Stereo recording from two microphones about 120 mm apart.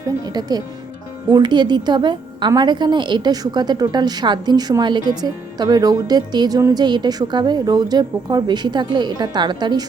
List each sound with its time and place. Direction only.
0.0 s a woman's voice: 35° right (ahead or behind)